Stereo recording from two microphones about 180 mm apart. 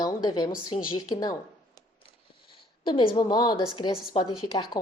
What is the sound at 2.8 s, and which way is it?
A woman's voice, 30° left (ahead or behind).